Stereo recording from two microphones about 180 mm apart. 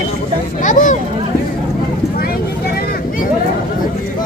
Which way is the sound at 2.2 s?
60° left (ahead or behind).